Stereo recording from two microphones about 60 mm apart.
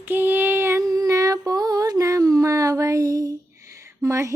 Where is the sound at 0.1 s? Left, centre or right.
Right.